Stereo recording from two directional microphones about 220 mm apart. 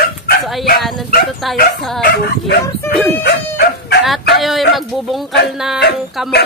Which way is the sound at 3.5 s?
50° left (ahead or behind).